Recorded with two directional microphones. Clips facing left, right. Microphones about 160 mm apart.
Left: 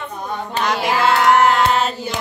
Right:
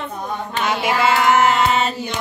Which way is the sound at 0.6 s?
Centre (ahead or behind).